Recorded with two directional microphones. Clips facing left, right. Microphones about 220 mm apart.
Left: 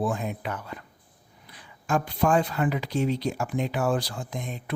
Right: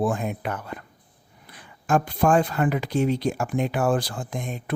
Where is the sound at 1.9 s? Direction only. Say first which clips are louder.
Right 3 dB; 50° right (ahead or behind).